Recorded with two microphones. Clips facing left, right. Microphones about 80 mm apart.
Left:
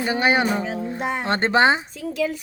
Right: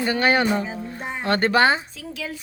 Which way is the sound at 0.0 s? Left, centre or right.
Centre.